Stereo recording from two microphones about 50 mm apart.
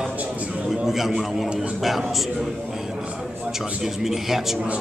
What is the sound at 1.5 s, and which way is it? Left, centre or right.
Speech, right.